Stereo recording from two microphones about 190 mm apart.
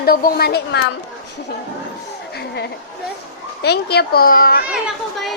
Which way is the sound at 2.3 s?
60° left (ahead or behind).